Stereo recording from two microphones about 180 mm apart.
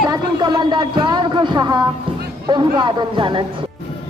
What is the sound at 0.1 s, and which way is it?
Speech, 20° right (ahead or behind).